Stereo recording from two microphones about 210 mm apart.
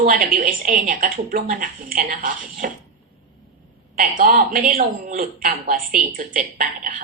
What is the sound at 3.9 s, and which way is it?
Speech, 40° right (ahead or behind).